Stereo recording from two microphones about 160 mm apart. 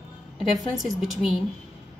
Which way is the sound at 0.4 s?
Centre (ahead or behind).